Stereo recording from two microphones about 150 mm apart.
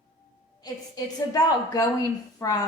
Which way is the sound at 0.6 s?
25° left (ahead or behind).